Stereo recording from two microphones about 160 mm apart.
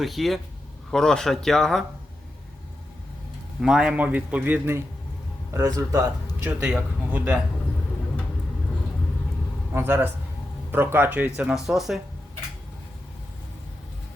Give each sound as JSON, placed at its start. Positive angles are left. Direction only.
{"t": 0.0, "sound": "speech", "side_deg": 0}
{"t": 3.6, "sound": "a man's voice", "side_deg": -5}
{"t": 6.4, "sound": "a man's voice", "side_deg": -10}
{"t": 9.7, "sound": "a man's voice", "side_deg": -15}